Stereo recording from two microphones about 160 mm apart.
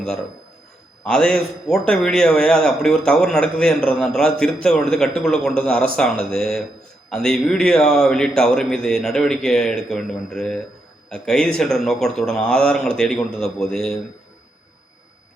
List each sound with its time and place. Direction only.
1.0 s speech: 5° left (ahead or behind)